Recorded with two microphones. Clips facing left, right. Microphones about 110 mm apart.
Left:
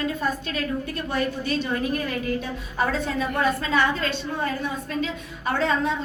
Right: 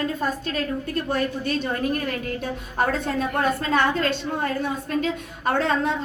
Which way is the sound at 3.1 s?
50° right (ahead or behind).